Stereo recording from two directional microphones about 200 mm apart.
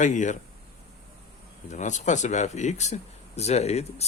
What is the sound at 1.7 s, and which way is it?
Speech, 35° left (ahead or behind).